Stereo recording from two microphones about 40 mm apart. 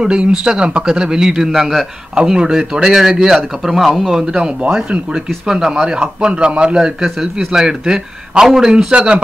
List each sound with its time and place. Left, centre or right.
0.0 s a man's voice: centre
1.5 s a man's voice: centre
2.1 s a man's voice: centre
5.9 s a man's voice: right